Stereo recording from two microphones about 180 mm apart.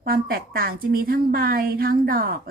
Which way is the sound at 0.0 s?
55° right (ahead or behind).